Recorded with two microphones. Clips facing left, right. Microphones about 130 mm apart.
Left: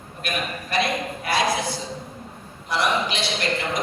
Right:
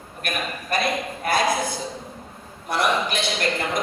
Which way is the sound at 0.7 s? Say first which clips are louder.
Even; 50° right (ahead or behind).